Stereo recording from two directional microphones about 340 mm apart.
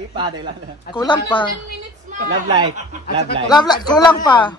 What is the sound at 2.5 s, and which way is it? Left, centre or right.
Speech, centre.